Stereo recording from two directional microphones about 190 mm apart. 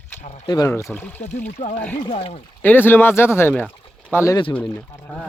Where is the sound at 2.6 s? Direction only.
10° left (ahead or behind).